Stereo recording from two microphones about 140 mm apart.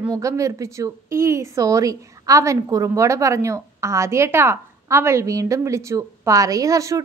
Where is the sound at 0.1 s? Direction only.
20° right (ahead or behind).